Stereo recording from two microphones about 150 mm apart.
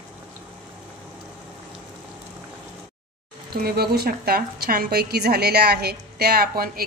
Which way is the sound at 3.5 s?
90° right.